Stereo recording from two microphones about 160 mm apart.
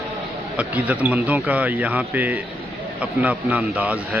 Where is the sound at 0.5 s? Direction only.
10° right (ahead or behind).